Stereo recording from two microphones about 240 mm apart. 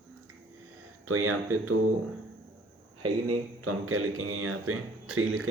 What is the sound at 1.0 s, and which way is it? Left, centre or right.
Speech, right.